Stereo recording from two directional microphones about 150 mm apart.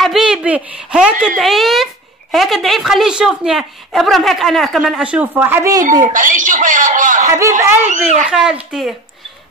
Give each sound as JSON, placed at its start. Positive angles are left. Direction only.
{"t": 0.0, "sound": "a woman's voice", "side_deg": 0}
{"t": 6.1, "sound": "a man's voice", "side_deg": -60}
{"t": 8.3, "sound": "a woman's voice", "side_deg": -5}